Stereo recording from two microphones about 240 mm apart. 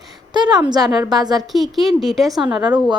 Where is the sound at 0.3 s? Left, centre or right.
Centre.